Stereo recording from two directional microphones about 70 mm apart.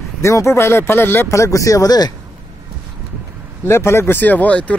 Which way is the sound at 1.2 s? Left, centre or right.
Left.